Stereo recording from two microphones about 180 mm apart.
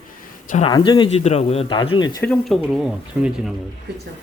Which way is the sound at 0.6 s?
25° left (ahead or behind).